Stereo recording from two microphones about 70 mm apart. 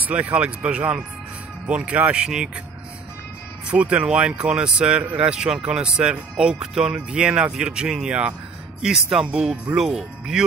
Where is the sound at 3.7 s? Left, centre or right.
Centre.